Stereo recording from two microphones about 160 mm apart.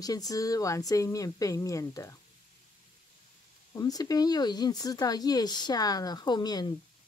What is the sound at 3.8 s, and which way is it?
Speech, 20° left (ahead or behind).